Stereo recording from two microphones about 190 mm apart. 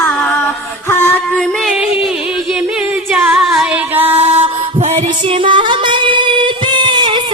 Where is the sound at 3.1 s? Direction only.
Centre (ahead or behind).